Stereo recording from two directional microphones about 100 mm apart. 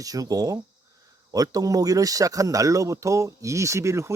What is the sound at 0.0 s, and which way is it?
Speech, 35° right (ahead or behind).